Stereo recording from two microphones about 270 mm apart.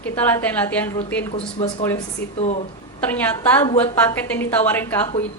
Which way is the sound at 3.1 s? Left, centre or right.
Centre.